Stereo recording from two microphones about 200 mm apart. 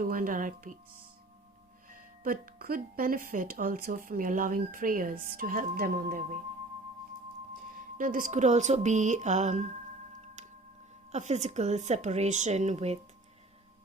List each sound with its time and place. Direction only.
0.0 s speech: 45° right (ahead or behind)
1.9 s speech: 45° right (ahead or behind)
7.9 s a woman's voice: 45° right (ahead or behind)
11.1 s a woman's voice: 35° right (ahead or behind)